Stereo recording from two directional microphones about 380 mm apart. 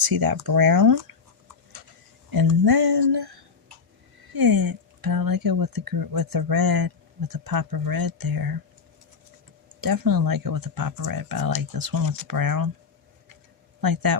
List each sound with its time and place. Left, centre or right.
0.1 s speech: right
2.3 s a sound: right
4.3 s speech: right
9.8 s speech: right
13.8 s speech: right